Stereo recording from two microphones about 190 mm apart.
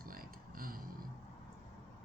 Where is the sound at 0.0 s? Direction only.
50° right (ahead or behind).